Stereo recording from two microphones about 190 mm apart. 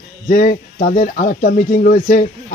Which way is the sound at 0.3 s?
50° left (ahead or behind).